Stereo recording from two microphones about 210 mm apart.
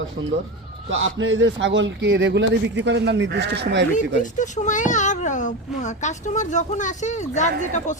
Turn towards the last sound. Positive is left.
turn(degrees=35)  # may be behind; listen again after turning